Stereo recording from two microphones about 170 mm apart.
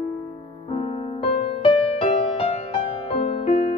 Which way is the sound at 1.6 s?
30° left (ahead or behind).